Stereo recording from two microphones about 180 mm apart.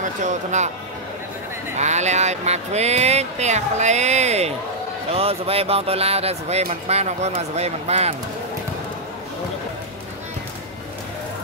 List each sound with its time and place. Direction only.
0.0 s speech: 40° right (ahead or behind)
1.8 s speech: 40° right (ahead or behind)